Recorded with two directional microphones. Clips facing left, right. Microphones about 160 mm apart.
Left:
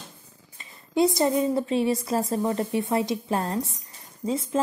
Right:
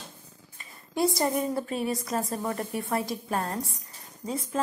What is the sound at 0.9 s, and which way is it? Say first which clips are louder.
A woman's voice: left 4 dB; 20° left (ahead or behind).